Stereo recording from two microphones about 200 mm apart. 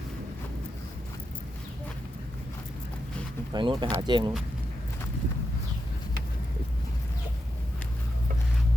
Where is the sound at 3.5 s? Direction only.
25° right (ahead or behind).